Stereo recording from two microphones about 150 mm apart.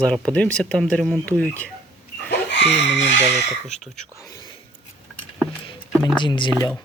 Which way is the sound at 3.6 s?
50° left (ahead or behind).